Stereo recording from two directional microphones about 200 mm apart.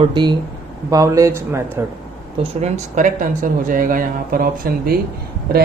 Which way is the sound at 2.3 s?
30° right (ahead or behind).